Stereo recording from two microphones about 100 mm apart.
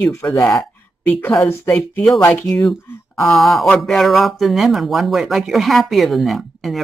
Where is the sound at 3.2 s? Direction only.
Centre (ahead or behind).